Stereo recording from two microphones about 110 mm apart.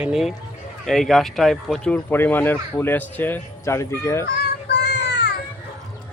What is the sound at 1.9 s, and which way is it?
Speech, 15° left (ahead or behind).